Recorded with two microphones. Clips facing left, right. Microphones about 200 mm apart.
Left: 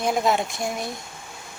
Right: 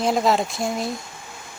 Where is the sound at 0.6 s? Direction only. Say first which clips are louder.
Right 3 dB; 25° right (ahead or behind).